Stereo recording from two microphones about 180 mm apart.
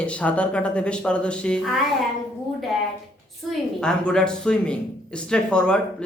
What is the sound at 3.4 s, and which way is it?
A woman's voice, 5° left (ahead or behind).